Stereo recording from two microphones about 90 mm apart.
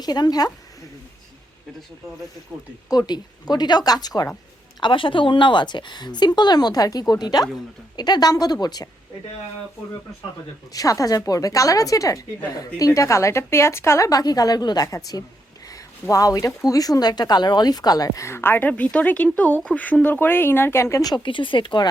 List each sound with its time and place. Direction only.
0.0 s speech: 45° left (ahead or behind)
3.1 s speech: 50° left (ahead or behind)
4.8 s speech: 70° left (ahead or behind); by 8.9 s 45° left (ahead or behind)
10.7 s speech: 40° left (ahead or behind); by 18.7 s 25° left (ahead or behind)
18.7 s speech: 15° left (ahead or behind)
21.2 s speech: 70° left (ahead or behind)